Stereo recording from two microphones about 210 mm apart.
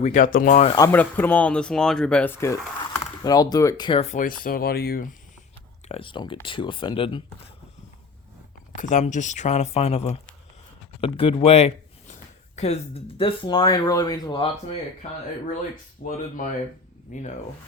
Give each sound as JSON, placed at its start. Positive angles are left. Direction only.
{"t": 0.0, "sound": "speech", "side_deg": 35}
{"t": 0.8, "sound": "speech", "side_deg": 10}
{"t": 5.9, "sound": "speech", "side_deg": 25}
{"t": 8.8, "sound": "speech", "side_deg": 35}
{"t": 16.0, "sound": "speech", "side_deg": 45}